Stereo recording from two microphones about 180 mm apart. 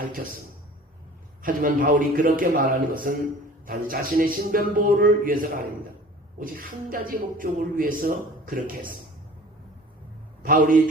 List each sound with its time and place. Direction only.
1.4 s a man's voice: 50° right (ahead or behind)
6.9 s a man's voice: 50° right (ahead or behind)
10.4 s a man's voice: 50° right (ahead or behind)